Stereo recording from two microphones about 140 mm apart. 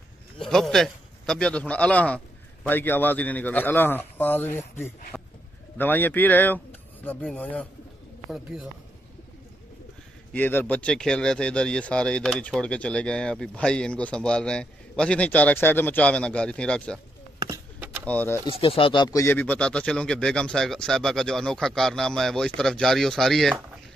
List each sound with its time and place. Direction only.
0.4 s speech: 5° left (ahead or behind)
5.1 s livestock: 5° left (ahead or behind)
5.8 s speech: 15° left (ahead or behind)
10.3 s speech: 10° left (ahead or behind)
18.0 s speech: 10° left (ahead or behind)
18.5 s speech: 40° left (ahead or behind)
19.0 s speech: 20° left (ahead or behind); by 23.5 s centre (ahead or behind)